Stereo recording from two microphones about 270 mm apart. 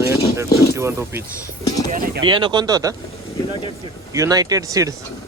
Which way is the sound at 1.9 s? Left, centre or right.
Right.